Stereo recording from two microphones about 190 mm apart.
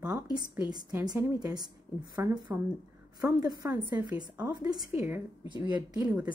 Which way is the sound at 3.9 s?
10° right (ahead or behind).